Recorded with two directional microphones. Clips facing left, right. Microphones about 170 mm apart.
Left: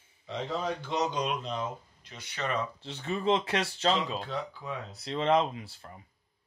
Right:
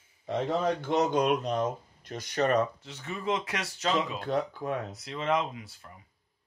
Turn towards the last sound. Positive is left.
turn(degrees=30)  # may be behind; listen again after turning